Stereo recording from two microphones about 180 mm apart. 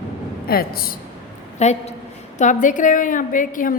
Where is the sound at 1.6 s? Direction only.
40° left (ahead or behind).